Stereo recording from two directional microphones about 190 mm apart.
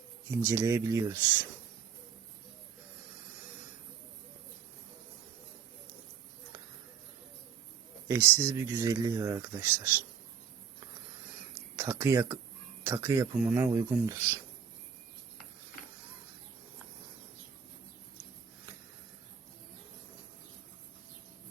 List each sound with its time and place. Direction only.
0.3 s speech: 15° right (ahead or behind)
8.0 s speech: 10° right (ahead or behind)
11.8 s speech: 15° right (ahead or behind)